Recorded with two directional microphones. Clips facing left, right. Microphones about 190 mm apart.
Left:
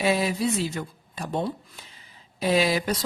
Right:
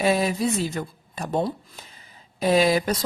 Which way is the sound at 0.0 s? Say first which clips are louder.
Right 2 dB; 45° right (ahead or behind).